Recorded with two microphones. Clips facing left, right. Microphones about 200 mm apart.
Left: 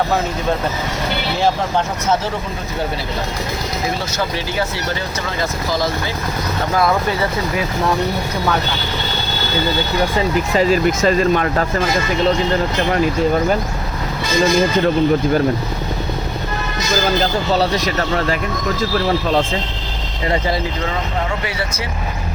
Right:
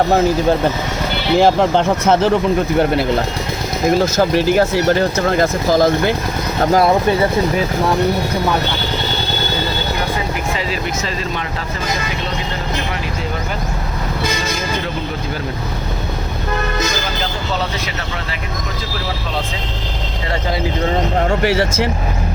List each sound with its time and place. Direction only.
1.4 s speech: 60° right (ahead or behind)
3.8 s speech: 45° right (ahead or behind)
6.7 s speech: 30° right (ahead or behind)
10.6 s speech: 45° left (ahead or behind)